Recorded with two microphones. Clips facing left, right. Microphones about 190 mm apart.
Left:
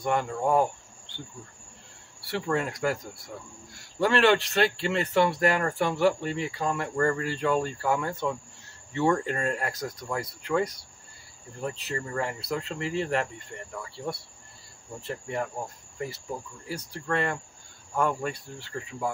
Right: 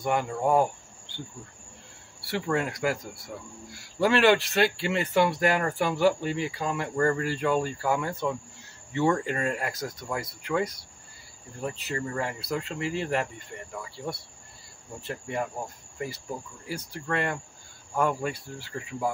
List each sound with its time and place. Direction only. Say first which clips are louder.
0.0 s speech: even; centre (ahead or behind)
2.2 s speech: even; centre (ahead or behind)
4.0 s speech: right 1 dB; 5° right (ahead or behind)
15.0 s speech: even; centre (ahead or behind)